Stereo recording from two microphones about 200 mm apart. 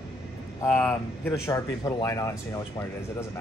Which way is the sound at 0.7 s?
10° left (ahead or behind).